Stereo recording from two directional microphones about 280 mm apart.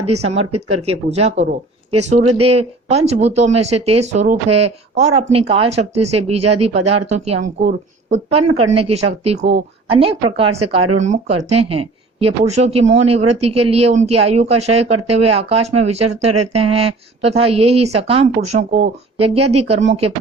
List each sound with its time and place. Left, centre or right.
0.3 s speech: right
0.9 s speech: right